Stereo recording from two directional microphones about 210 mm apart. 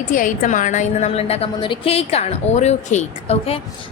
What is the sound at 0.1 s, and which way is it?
A woman's voice, 40° left (ahead or behind).